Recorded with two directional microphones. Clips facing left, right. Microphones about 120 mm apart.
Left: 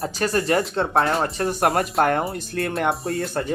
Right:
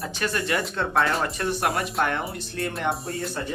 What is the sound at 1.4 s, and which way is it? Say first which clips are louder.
Speech: left 5 dB; 50° left (ahead or behind).